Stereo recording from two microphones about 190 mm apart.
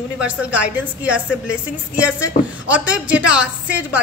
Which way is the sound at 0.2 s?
5° right (ahead or behind).